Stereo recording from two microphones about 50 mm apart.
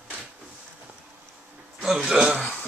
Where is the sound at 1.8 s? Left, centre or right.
Centre.